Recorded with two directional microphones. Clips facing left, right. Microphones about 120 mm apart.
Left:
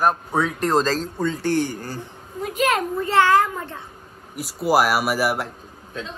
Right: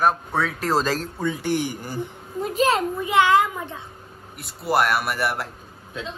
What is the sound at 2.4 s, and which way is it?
Speech, 40° right (ahead or behind).